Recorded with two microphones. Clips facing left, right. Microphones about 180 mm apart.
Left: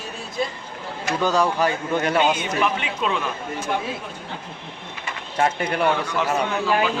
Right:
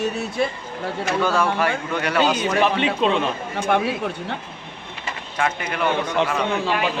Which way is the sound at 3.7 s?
65° right (ahead or behind).